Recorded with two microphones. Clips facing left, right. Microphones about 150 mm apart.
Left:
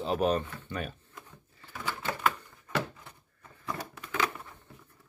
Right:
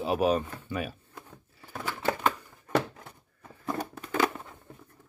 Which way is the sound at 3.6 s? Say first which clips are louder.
Right 5 dB; 45° right (ahead or behind).